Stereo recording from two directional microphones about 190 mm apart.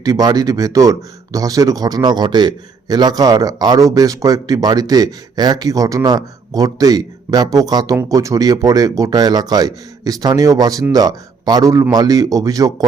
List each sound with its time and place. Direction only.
0.0 s speech: 20° right (ahead or behind)